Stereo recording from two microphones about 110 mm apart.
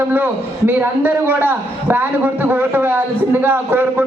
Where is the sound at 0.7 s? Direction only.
20° right (ahead or behind).